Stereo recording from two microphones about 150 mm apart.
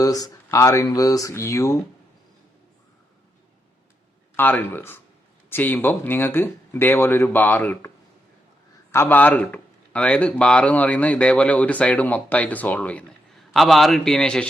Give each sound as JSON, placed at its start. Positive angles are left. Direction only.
{"t": 0.0, "sound": "speech", "side_deg": 25}
{"t": 4.4, "sound": "speech", "side_deg": 15}
{"t": 8.9, "sound": "a man's voice", "side_deg": 15}